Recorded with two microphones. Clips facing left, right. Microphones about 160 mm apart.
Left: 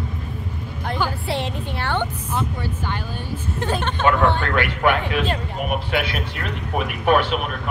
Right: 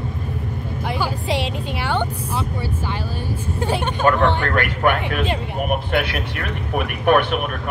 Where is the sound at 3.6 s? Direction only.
10° right (ahead or behind).